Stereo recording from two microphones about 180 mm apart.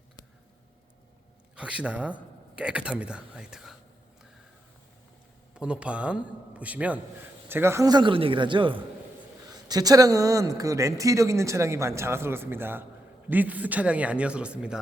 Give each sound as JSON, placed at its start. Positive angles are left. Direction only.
{"t": 1.5, "sound": "speech", "side_deg": -5}
{"t": 5.5, "sound": "speech", "side_deg": -5}